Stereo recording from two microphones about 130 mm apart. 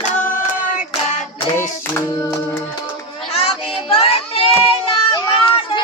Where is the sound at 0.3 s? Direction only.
85° left.